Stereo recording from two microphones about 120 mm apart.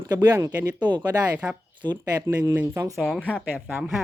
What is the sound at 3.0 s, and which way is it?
Speech, 5° left (ahead or behind).